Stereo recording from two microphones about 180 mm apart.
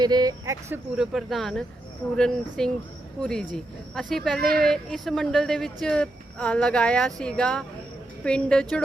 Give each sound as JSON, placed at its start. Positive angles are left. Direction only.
{"t": 0.0, "sound": "speech", "side_deg": -25}
{"t": 0.9, "sound": "speech", "side_deg": 0}